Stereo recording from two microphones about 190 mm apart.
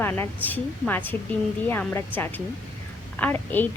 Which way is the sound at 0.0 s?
10° left (ahead or behind).